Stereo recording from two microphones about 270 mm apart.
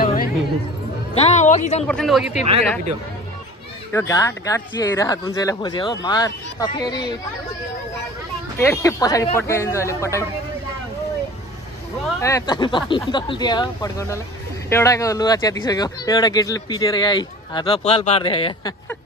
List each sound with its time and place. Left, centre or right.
0.0 s a sound: left
1.1 s speech: left
1.9 s speech: centre
3.9 s speech: centre
8.5 s speech: centre
12.2 s speech: centre